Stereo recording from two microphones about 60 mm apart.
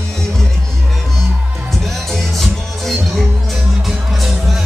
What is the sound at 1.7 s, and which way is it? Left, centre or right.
Music, centre.